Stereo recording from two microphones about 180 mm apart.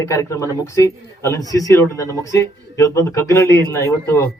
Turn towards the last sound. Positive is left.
turn(degrees=15)  # may be behind; listen again after turning